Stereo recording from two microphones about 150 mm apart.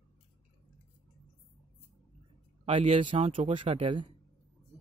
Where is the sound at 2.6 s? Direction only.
40° right (ahead or behind).